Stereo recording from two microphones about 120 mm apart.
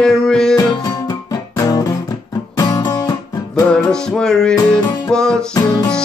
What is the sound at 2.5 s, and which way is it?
Music, 30° left (ahead or behind).